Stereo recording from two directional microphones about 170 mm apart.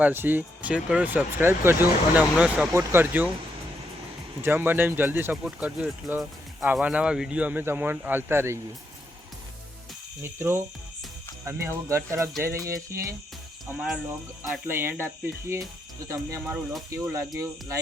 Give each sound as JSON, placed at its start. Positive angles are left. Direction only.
{"t": 0.0, "sound": "speech", "side_deg": -10}
{"t": 4.4, "sound": "speech", "side_deg": -10}
{"t": 10.2, "sound": "speech", "side_deg": -15}
{"t": 16.9, "sound": "speech", "side_deg": -15}